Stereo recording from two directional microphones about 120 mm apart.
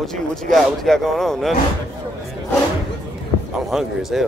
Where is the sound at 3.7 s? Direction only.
5° right (ahead or behind).